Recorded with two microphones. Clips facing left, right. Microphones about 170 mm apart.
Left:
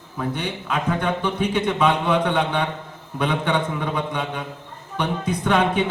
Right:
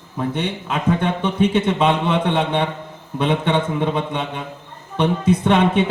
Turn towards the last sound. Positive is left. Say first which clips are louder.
# right 5 dB
turn(degrees=-25)  # may be behind; listen again after turning